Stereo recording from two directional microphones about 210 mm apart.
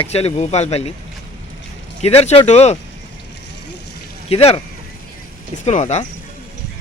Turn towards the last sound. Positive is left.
turn(degrees=35)  # may be behind; listen again after turning